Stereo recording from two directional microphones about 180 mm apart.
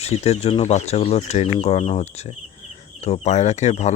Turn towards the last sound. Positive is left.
turn(degrees=40)  # may be behind; listen again after turning